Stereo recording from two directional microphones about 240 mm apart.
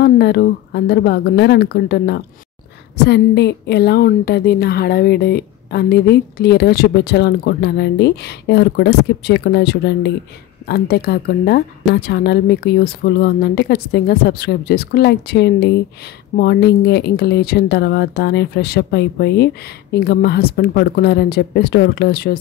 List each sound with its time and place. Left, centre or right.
0.0 s a woman's voice: left